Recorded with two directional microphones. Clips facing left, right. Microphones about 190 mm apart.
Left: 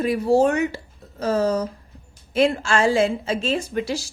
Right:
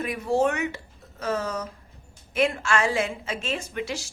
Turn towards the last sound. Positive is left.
turn(degrees=35)  # may be behind; listen again after turning